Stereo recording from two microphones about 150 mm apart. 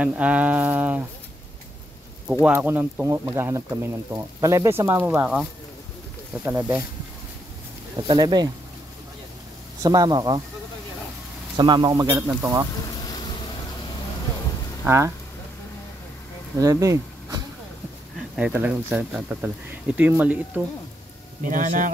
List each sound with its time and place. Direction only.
0.0 s speech: 10° right (ahead or behind)
2.4 s speech: 15° right (ahead or behind)
8.1 s a man's voice: 30° right (ahead or behind)
9.8 s a man's voice: 25° right (ahead or behind)
11.5 s a man's voice: 30° right (ahead or behind)
12.8 s boat: 25° left (ahead or behind)
14.9 s speech: 20° right (ahead or behind)
16.5 s speech: 20° right (ahead or behind)
18.3 s speech: 10° right (ahead or behind)
21.5 s speech: 60° right (ahead or behind)